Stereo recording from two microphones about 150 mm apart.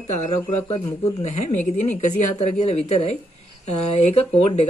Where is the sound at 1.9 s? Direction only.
50° left (ahead or behind).